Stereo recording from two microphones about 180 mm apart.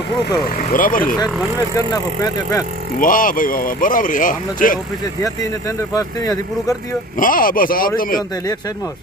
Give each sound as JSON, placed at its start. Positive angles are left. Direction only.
{"t": 0.7, "sound": "speech", "side_deg": 50}
{"t": 1.7, "sound": "speech", "side_deg": 20}
{"t": 3.0, "sound": "speech", "side_deg": 50}
{"t": 5.2, "sound": "speech", "side_deg": 20}
{"t": 7.2, "sound": "speech", "side_deg": 50}